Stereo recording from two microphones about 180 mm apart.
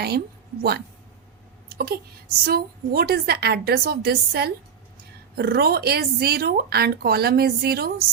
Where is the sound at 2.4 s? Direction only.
55° right (ahead or behind).